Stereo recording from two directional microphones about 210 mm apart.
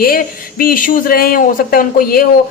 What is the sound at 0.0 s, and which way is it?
A woman's voice, 45° left (ahead or behind).